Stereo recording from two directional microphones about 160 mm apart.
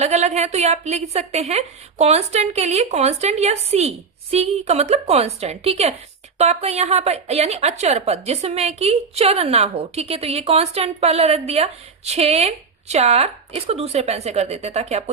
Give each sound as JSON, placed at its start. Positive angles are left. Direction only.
{"t": 0.0, "sound": "a woman's voice", "side_deg": -45}